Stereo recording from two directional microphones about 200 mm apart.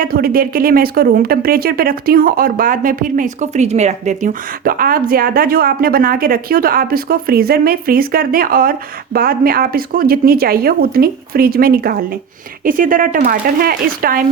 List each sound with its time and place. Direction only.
0.0 s speech: 45° right (ahead or behind)